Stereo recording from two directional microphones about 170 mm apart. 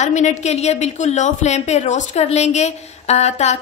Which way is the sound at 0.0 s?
45° left (ahead or behind).